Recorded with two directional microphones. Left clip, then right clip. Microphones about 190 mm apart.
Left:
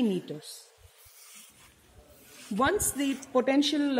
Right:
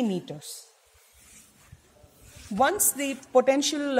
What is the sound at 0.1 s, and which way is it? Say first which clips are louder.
Speech: even; 50° right (ahead or behind).